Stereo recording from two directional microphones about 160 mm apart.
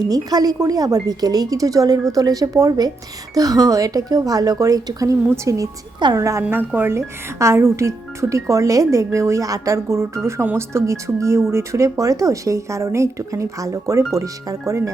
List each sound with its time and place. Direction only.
0.1 s speech: 25° right (ahead or behind)